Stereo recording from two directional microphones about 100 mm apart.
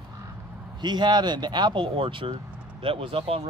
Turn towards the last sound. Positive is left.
turn(degrees=-75)  # may be behind; listen again after turning